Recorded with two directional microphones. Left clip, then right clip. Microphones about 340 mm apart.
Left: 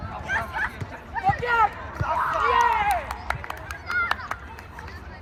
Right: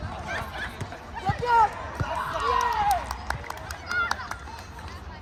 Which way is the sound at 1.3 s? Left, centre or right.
Left.